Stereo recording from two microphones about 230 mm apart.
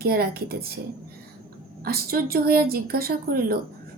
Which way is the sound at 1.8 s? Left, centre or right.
Right.